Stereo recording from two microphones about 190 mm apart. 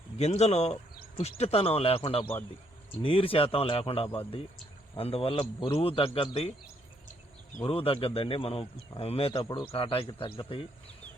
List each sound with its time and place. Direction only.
0.2 s speech: 35° left (ahead or behind)
7.6 s speech: 30° left (ahead or behind)